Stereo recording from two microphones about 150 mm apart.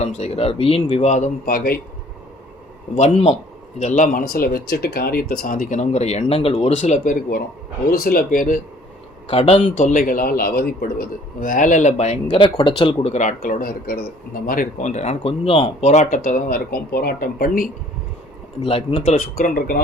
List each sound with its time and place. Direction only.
0.0 s a man's voice: 45° left (ahead or behind); by 1.8 s 80° left
3.8 s speech: 55° left (ahead or behind)
7.9 s speech: 90° left; by 8.6 s 65° left (ahead or behind)
9.2 s speech: 40° left (ahead or behind)
12.4 s speech: 35° left (ahead or behind)
13.4 s speech: 75° left (ahead or behind)
14.4 s speech: 70° left (ahead or behind); by 17.7 s 85° left
18.6 s a man's voice: 40° left (ahead or behind)
19.1 s speech: 70° left (ahead or behind)